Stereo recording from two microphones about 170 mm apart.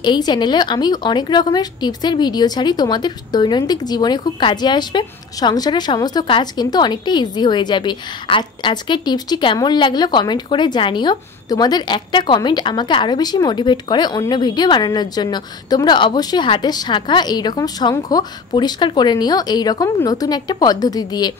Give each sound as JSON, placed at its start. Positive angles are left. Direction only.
{"t": 0.0, "sound": "a woman's voice", "side_deg": 25}